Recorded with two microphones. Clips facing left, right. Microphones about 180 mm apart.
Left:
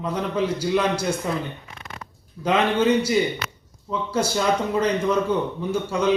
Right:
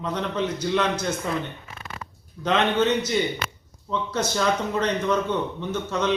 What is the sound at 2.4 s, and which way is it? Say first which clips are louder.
Speech: left 1 dB; 10° left (ahead or behind).